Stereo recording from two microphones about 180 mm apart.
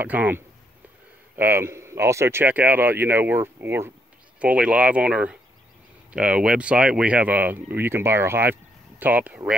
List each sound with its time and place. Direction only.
0.0 s speech: 10° right (ahead or behind)